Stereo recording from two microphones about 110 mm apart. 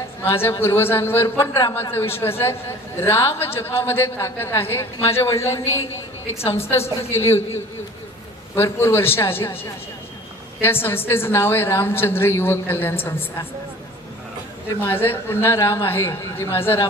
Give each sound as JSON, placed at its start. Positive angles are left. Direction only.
{"t": 0.2, "sound": "a woman's voice", "side_deg": 20}
{"t": 7.1, "sound": "a woman's voice", "side_deg": 25}
{"t": 8.5, "sound": "a woman's voice", "side_deg": 20}
{"t": 14.9, "sound": "a woman's voice", "side_deg": 20}